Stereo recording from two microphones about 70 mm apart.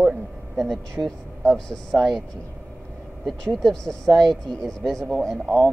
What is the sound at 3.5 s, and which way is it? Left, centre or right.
Speech, centre.